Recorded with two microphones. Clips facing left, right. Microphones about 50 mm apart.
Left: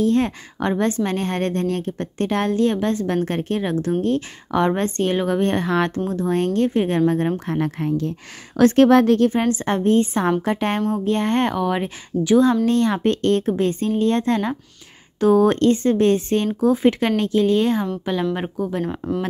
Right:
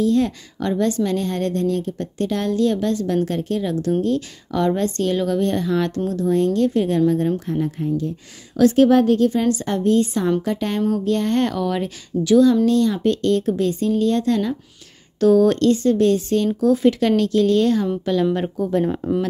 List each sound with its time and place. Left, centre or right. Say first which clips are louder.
0.0 s a woman's voice: even; left
5.9 s a woman's voice: right 1 dB; left
6.2 s a woman's voice: right 2 dB; left
7.4 s speech: even; left
8.5 s speech: even; left
8.8 s speech: left 1 dB; left
9.3 s a woman's voice: even; left
15.1 s a woman's voice: right 1 dB; left; by 19.2 s centre